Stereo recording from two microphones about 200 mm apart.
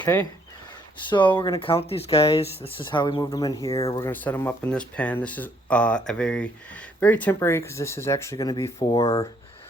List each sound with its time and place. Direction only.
0.0 s speech: 10° left (ahead or behind)
1.1 s speech: 25° left (ahead or behind)